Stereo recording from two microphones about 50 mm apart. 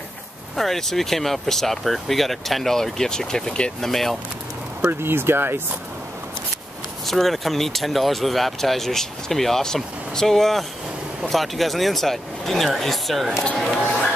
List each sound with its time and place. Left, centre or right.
0.6 s speech: centre
3.8 s speech: centre
4.8 s speech: right
7.1 s speech: centre